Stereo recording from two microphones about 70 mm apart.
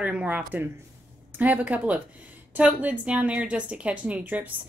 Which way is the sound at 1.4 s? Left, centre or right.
Right.